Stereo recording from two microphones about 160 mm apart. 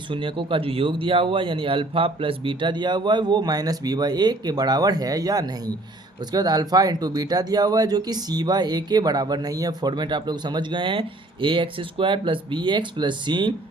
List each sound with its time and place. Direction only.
0.1 s speech: 30° right (ahead or behind)